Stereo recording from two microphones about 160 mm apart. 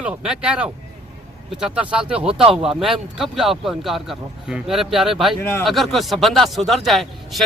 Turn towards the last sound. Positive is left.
turn(degrees=0)  # may be behind; listen again after turning